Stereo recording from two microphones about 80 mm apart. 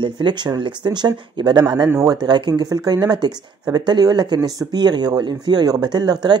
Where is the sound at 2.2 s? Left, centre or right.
Right.